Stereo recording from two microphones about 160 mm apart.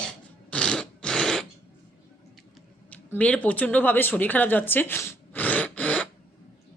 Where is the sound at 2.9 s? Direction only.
10° left (ahead or behind).